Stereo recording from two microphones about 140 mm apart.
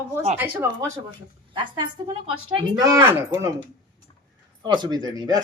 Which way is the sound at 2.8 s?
25° right (ahead or behind).